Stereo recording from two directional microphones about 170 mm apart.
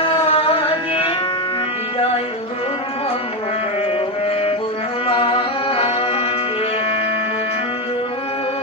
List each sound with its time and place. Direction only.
0.0 s carnatic music: 35° left (ahead or behind)
5.0 s music: 35° left (ahead or behind)